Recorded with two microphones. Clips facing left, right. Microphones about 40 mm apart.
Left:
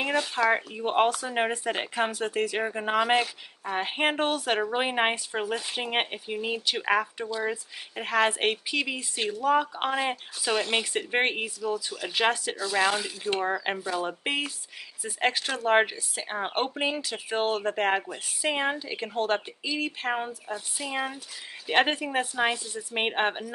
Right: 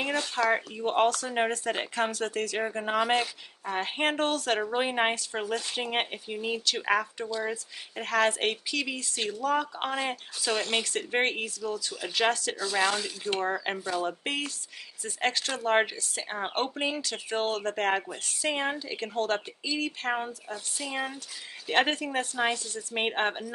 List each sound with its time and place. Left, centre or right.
0.0 s speech: centre
12.5 s speech: centre